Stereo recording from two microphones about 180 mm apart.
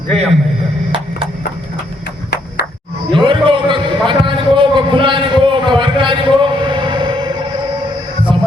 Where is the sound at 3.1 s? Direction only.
30° right (ahead or behind).